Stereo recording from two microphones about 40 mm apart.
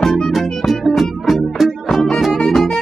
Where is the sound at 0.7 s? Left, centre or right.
Centre.